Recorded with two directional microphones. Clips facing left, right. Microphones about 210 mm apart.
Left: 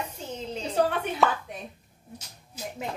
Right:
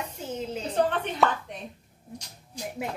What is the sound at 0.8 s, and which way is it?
Speech, 10° left (ahead or behind).